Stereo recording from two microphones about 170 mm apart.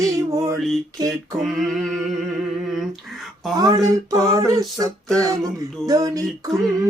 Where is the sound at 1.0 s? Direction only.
20° right (ahead or behind).